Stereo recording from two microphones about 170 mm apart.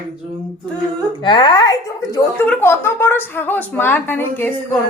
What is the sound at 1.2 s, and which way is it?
A woman's voice, 30° left (ahead or behind).